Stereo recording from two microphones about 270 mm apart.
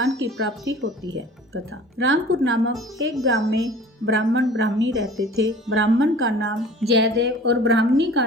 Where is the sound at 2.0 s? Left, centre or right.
Right.